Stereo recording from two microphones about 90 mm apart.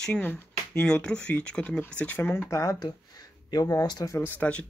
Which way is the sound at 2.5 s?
35° left (ahead or behind).